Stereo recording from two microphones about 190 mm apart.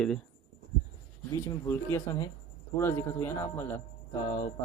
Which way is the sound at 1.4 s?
15° left (ahead or behind).